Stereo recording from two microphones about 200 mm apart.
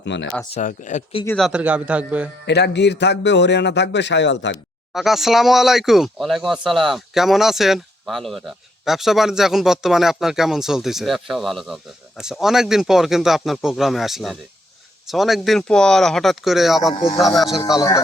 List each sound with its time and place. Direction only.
0.0 s speech: 65° left (ahead or behind)
0.5 s speech: 40° left (ahead or behind)
1.4 s a man's voice: 5° right (ahead or behind)
2.5 s speech: 60° left (ahead or behind)
4.9 s speech: centre (ahead or behind)
17.7 s speech: 15° left (ahead or behind)